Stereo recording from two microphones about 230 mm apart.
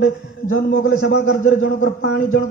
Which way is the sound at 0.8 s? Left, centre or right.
Left.